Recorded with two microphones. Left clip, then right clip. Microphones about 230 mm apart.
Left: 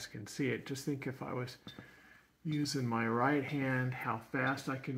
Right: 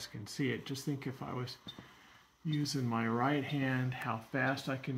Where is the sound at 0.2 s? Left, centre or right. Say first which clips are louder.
Even; right.